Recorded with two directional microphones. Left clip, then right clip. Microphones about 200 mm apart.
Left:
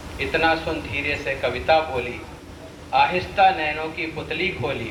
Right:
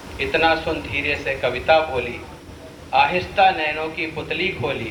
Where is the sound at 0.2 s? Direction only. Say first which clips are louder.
Right 2 dB; 25° right (ahead or behind).